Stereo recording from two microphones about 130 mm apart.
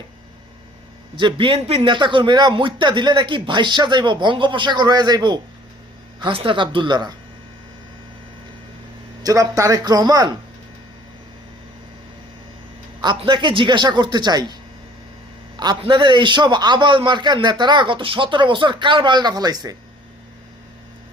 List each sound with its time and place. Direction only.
1.1 s a man's voice: 40° right (ahead or behind)
9.2 s speech: 25° right (ahead or behind)
13.1 s a man's voice: 40° right (ahead or behind)
15.5 s a man's voice: 35° right (ahead or behind)